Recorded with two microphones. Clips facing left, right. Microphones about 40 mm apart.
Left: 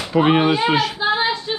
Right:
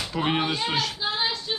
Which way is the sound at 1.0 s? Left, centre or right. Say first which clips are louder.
Left 8 dB; left.